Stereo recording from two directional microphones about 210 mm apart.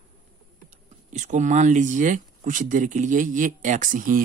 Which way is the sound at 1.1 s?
35° right (ahead or behind).